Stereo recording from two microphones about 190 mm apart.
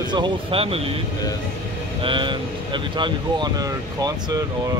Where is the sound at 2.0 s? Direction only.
25° right (ahead or behind).